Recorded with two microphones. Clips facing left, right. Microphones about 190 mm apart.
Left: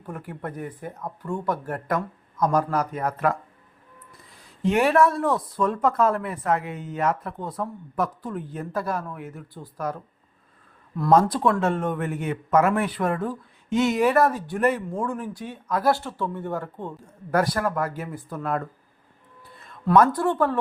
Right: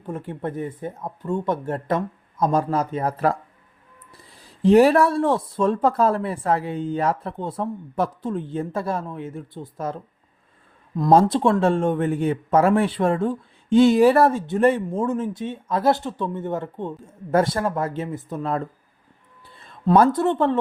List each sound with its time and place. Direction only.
0.0 s speech: 25° right (ahead or behind)
11.1 s speech: 25° right (ahead or behind)